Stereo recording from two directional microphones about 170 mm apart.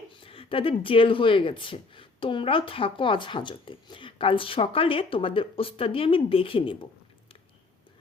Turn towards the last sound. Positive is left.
turn(degrees=30)  # may be behind; listen again after turning